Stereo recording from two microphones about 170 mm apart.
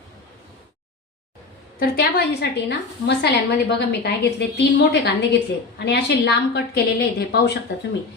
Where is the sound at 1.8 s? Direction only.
65° left (ahead or behind).